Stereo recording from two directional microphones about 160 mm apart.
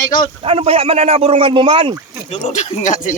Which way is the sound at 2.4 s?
45° left (ahead or behind).